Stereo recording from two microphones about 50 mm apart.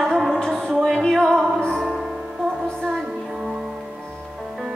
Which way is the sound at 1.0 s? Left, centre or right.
Centre.